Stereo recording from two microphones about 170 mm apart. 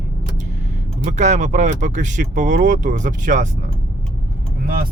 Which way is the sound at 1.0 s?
45° right (ahead or behind).